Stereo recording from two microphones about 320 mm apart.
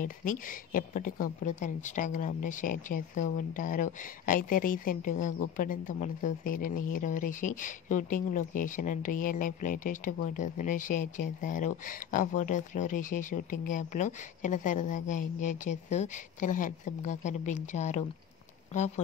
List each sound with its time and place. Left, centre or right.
0.0 s speech: left